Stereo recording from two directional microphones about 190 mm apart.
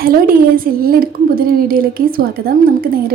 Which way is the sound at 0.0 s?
50° right (ahead or behind).